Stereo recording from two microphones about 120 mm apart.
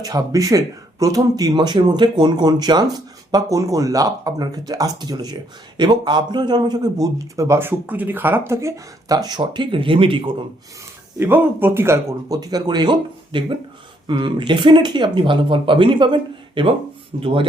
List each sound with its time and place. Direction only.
0.0 s speech: 30° right (ahead or behind); by 10.2 s 45° right (ahead or behind)
11.2 s speech: 20° right (ahead or behind); by 17.4 s 50° right (ahead or behind)